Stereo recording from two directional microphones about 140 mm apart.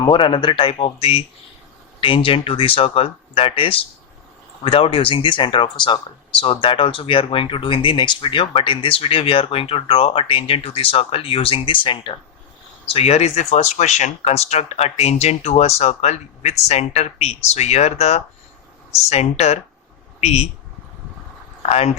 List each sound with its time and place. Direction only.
0.0 s speech: 35° left (ahead or behind)
12.9 s speech: 45° left (ahead or behind)
21.6 s speech: 50° left (ahead or behind)